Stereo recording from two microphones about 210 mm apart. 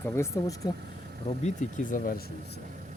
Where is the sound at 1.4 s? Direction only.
35° left (ahead or behind).